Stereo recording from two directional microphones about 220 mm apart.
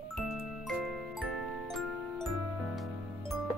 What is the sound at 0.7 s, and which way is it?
Glockenspiel, centre (ahead or behind).